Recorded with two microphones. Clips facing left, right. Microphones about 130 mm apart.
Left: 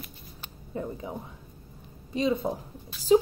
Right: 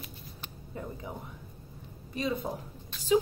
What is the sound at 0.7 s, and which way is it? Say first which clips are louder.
A woman's voice: left 6 dB; 20° left (ahead or behind).